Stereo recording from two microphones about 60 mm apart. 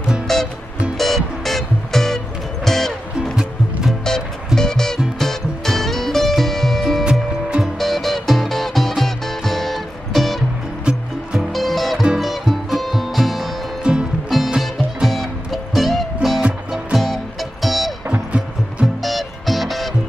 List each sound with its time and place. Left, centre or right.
0.3 s music: centre
4.6 s music: centre
7.1 s music: centre
7.8 s music: centre
10.9 s music: centre
11.3 s music: centre
13.9 s music: centre
14.6 s music: centre
18.1 s music: centre
19.0 s music: centre